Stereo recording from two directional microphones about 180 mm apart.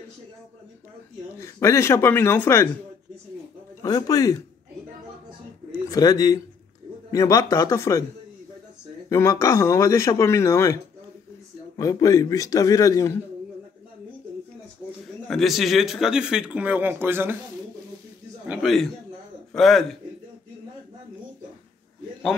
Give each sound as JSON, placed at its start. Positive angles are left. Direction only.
{"t": 1.4, "sound": "speech", "side_deg": 15}
{"t": 3.8, "sound": "a man's voice", "side_deg": 20}
{"t": 5.7, "sound": "a man's voice", "side_deg": 20}
{"t": 9.1, "sound": "a man's voice", "side_deg": 15}
{"t": 15.2, "sound": "speech", "side_deg": 0}
{"t": 18.5, "sound": "speech", "side_deg": 0}